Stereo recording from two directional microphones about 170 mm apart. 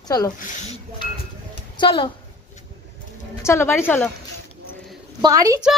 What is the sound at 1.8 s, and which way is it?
Speech, 30° left (ahead or behind).